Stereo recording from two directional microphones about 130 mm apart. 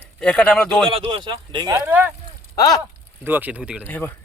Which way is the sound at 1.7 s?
15° right (ahead or behind).